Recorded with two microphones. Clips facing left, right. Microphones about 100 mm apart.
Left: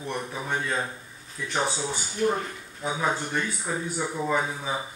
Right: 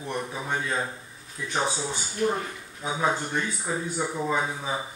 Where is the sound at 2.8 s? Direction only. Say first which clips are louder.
Right 1 dB; centre (ahead or behind).